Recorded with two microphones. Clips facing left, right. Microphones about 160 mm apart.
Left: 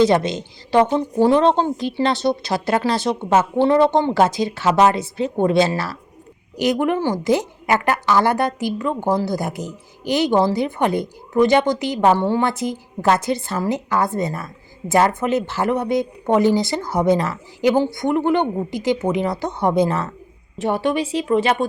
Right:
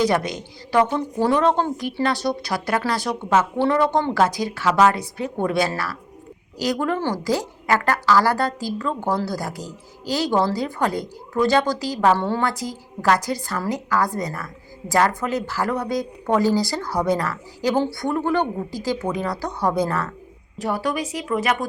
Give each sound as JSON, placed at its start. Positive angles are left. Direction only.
{"t": 0.0, "sound": "a woman's voice", "side_deg": 25}